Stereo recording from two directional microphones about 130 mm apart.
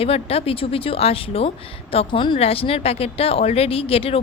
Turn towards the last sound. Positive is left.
turn(degrees=45)  # may be behind; listen again after turning